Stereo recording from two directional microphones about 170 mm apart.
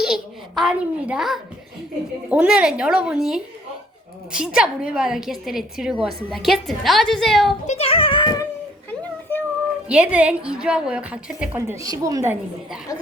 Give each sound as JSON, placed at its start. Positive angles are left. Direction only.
{"t": 0.0, "sound": "a child's voice", "side_deg": 0}
{"t": 7.7, "sound": "music", "side_deg": 35}
{"t": 9.9, "sound": "a woman's voice", "side_deg": -5}